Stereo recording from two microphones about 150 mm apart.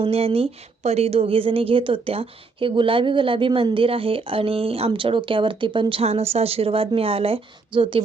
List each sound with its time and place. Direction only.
0.0 s a woman's voice: 40° right (ahead or behind)